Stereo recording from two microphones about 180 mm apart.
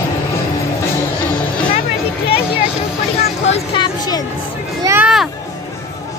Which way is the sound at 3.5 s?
25° left (ahead or behind).